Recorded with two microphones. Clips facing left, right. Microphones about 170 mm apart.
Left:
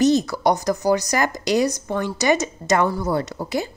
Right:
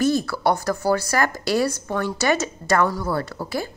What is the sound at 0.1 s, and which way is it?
A woman's voice, 15° left (ahead or behind).